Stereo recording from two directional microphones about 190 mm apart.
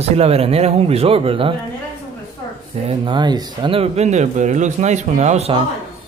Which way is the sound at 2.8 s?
25° right (ahead or behind).